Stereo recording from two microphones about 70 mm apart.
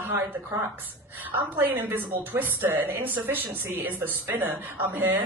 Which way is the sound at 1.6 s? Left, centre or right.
Right.